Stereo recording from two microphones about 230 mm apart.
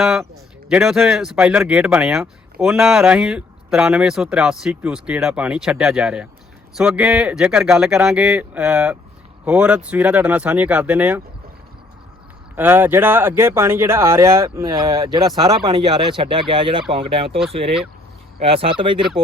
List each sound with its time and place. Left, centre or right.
0.0 s speech: centre
12.5 s speech: centre